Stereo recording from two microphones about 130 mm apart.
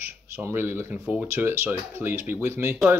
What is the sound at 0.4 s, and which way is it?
Speech, 20° right (ahead or behind).